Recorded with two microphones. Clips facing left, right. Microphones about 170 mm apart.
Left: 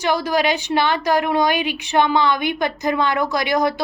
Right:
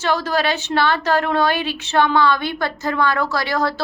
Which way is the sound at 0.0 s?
15° left (ahead or behind).